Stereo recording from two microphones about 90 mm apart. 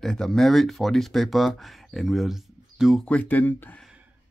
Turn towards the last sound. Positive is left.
turn(degrees=20)  # may be behind; listen again after turning